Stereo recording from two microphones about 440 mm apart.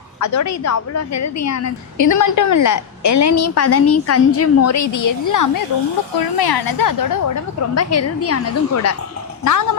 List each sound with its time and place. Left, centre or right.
0.2 s a woman's voice: left
6.1 s a woman's voice: left
7.8 s a woman's voice: left